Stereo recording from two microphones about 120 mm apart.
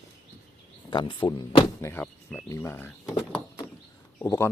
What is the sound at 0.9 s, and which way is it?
Speech, 40° left (ahead or behind).